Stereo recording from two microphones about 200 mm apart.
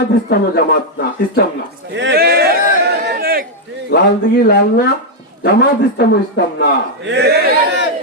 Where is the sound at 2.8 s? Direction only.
50° right (ahead or behind).